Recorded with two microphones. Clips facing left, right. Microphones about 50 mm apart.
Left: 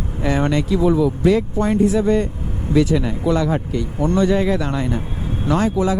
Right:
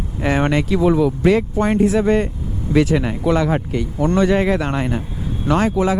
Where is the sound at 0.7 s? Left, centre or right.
Right.